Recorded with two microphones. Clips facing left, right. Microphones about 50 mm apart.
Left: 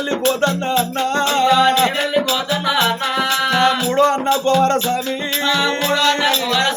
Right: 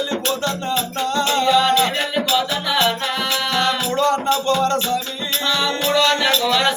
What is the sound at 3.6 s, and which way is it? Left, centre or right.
Music, left.